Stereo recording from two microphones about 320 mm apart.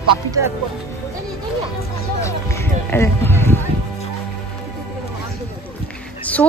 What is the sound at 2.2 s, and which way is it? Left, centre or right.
Music, centre.